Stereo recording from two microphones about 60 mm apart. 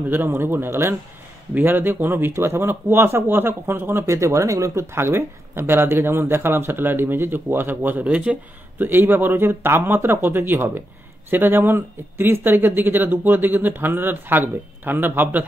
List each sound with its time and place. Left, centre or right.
0.1 s speech: right
4.9 s speech: right
8.8 s speech: right